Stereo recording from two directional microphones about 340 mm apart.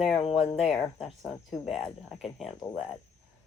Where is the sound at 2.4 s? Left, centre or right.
Centre.